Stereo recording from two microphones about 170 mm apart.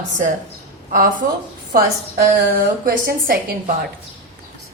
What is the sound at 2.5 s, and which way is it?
Speech, 60° right (ahead or behind).